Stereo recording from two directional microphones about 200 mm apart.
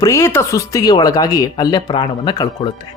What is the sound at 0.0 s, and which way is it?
Speech, 15° left (ahead or behind).